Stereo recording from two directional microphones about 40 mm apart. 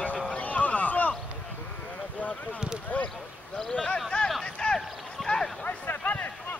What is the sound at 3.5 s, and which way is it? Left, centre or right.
Speech, centre.